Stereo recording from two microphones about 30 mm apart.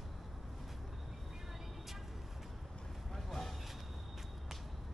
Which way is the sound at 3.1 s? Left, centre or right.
Centre.